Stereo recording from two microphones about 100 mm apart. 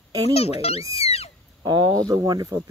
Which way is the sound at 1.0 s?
90° left.